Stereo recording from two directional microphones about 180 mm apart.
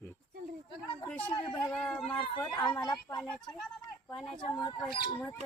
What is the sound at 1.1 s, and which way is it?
Speech, 5° left (ahead or behind).